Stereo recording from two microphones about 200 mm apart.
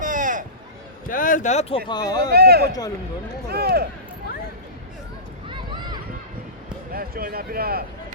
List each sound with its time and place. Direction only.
0.0 s a sound: 40° right (ahead or behind)
1.0 s speech: 40° left (ahead or behind)
1.9 s speech: 20° left (ahead or behind)
2.3 s speech: 50° right (ahead or behind)
5.5 s a sound: 20° right (ahead or behind)
6.9 s speech: 50° right (ahead or behind)